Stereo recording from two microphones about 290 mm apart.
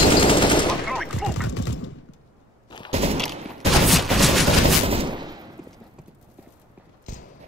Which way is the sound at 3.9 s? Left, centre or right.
Centre.